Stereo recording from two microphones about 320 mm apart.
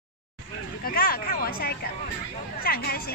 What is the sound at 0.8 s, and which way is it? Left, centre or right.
A woman's voice, left.